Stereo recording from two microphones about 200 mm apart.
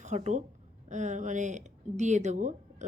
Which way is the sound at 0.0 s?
35° right (ahead or behind).